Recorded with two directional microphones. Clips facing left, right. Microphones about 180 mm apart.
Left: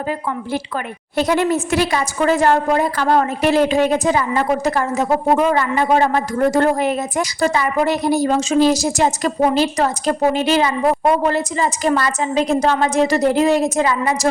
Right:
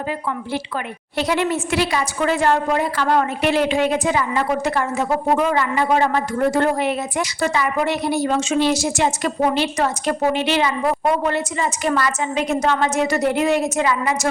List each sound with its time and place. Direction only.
1.1 s a woman's voice: 45° left (ahead or behind)